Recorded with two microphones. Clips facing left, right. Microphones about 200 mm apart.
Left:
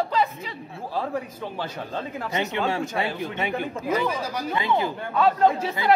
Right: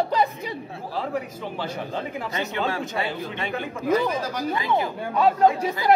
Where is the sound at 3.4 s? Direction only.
10° left (ahead or behind).